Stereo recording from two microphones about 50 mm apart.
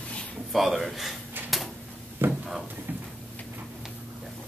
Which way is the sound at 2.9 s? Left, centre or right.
Right.